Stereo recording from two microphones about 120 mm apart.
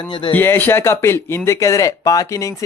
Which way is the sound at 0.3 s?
15° left (ahead or behind).